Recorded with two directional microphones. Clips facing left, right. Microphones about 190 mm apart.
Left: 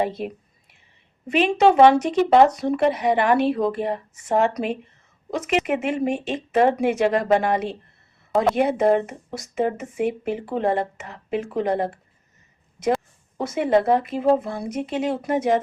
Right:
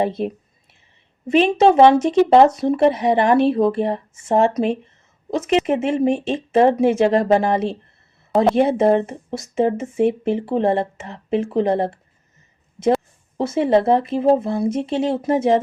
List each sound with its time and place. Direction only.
1.3 s speech: 25° right (ahead or behind)